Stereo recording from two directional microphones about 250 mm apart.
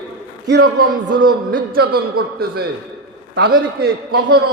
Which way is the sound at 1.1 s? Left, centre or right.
Right.